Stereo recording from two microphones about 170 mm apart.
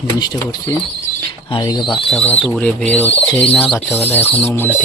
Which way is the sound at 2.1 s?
5° left (ahead or behind).